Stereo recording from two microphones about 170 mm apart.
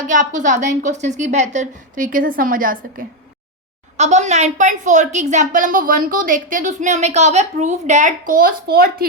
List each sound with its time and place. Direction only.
0.1 s a woman's voice: 50° right (ahead or behind)
2.0 s a woman's voice: 55° right (ahead or behind)
3.9 s a woman's voice: 40° right (ahead or behind); by 9.0 s 60° right (ahead or behind)